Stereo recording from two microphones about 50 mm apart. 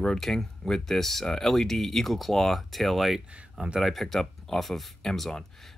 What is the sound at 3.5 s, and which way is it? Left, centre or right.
Speech, centre.